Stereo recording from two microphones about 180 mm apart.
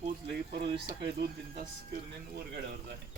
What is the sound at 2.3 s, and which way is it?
Speech, 60° right (ahead or behind).